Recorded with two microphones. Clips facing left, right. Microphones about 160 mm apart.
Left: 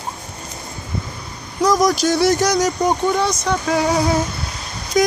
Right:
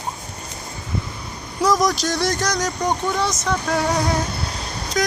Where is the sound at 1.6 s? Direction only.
Centre (ahead or behind).